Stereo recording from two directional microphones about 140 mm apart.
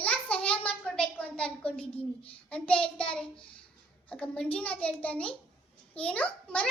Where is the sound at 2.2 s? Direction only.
10° left (ahead or behind).